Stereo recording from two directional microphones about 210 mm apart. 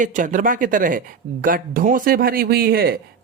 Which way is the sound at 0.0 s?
40° right (ahead or behind).